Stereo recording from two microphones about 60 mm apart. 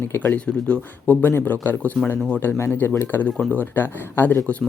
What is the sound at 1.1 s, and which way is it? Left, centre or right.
Speech, left.